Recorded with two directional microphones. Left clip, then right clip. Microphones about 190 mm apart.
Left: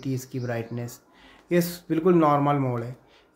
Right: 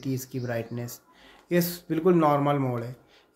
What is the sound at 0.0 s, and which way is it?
Speech, centre (ahead or behind).